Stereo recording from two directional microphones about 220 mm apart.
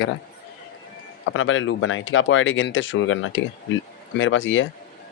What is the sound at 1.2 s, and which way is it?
Speech, 60° left (ahead or behind).